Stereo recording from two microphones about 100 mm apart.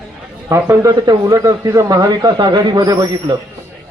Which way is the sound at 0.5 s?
25° right (ahead or behind).